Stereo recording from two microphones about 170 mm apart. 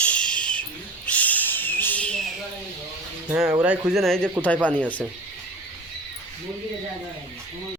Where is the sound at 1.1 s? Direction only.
10° left (ahead or behind).